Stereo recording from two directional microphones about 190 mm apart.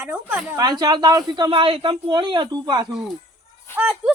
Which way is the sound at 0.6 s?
20° right (ahead or behind).